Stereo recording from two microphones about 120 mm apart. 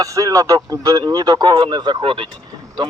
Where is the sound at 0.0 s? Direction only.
30° right (ahead or behind); by 2.2 s 45° right (ahead or behind).